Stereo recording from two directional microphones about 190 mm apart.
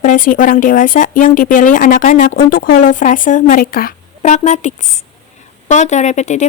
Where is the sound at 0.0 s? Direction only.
45° left (ahead or behind).